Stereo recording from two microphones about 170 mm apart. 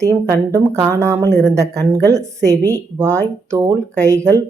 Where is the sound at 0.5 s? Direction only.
15° right (ahead or behind).